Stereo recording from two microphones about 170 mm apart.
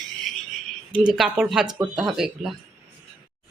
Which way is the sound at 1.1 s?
5° right (ahead or behind).